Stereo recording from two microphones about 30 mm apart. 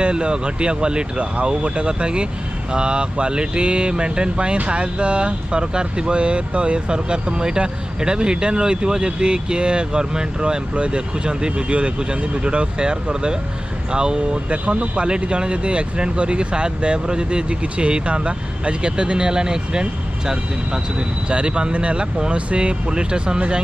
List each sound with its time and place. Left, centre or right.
0.0 s speech: right
10.7 s speech: right
21.3 s speech: right